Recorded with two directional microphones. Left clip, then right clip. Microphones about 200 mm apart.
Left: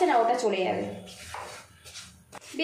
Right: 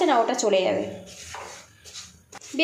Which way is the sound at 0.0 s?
40° right (ahead or behind).